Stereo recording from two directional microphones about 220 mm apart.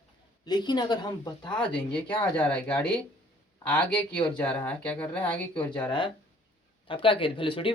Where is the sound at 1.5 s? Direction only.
5° left (ahead or behind).